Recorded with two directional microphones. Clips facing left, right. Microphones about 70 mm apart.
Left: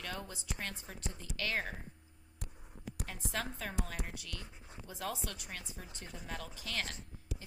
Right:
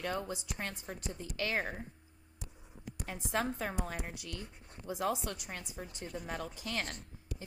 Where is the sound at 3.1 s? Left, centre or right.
Right.